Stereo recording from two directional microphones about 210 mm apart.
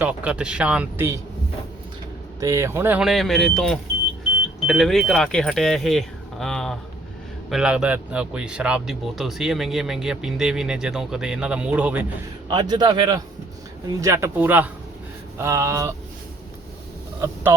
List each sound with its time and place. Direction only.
0.0 s speech: 5° right (ahead or behind)
2.4 s speech: 15° right (ahead or behind)
12.5 s a man's voice: 20° right (ahead or behind)